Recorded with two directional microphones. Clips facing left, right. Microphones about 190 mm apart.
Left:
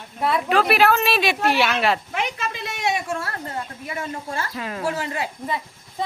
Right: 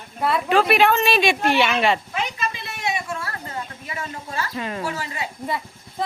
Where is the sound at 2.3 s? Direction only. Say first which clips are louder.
Left 1 dB; 80° left.